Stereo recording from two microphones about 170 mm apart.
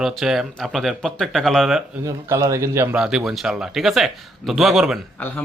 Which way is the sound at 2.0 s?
20° right (ahead or behind).